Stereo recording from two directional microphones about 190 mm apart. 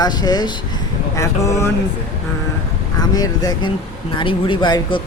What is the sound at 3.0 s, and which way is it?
Speech, 20° left (ahead or behind).